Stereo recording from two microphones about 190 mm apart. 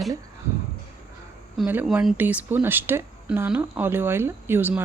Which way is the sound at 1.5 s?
5° right (ahead or behind).